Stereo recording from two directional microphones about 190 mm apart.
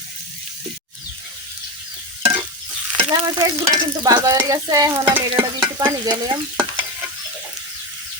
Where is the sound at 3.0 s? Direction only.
25° right (ahead or behind).